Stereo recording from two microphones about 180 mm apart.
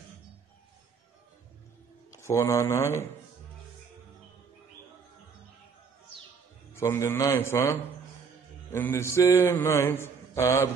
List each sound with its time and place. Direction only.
2.0 s speech: 15° left (ahead or behind)
6.8 s mantra: 15° left (ahead or behind)